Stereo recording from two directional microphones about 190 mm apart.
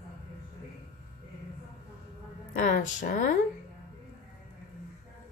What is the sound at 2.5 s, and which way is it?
Speech, 45° left (ahead or behind).